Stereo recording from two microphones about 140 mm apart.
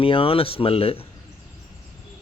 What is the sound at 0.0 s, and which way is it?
Speech, 40° left (ahead or behind).